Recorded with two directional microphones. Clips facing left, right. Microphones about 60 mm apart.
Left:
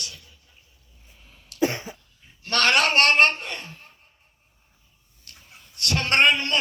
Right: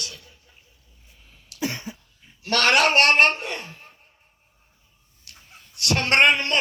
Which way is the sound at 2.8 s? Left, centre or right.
Right.